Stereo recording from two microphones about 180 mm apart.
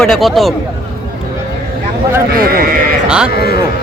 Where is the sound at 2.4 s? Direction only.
55° right (ahead or behind).